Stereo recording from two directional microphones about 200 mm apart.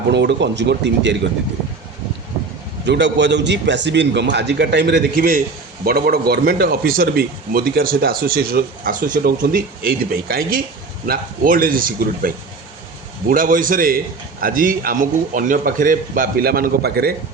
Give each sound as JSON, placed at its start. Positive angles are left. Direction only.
{"t": 0.1, "sound": "a man's voice", "side_deg": -60}
{"t": 2.8, "sound": "a man's voice", "side_deg": -60}